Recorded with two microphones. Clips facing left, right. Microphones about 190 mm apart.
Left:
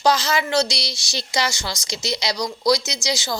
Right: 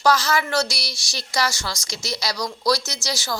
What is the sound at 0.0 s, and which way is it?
A woman's voice, 20° left (ahead or behind).